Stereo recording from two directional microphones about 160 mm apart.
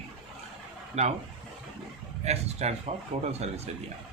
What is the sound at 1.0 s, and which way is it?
Speech, 45° right (ahead or behind).